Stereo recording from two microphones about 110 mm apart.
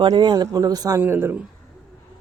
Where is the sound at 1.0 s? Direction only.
20° right (ahead or behind).